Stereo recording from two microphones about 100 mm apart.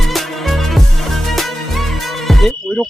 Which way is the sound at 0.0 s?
Centre (ahead or behind).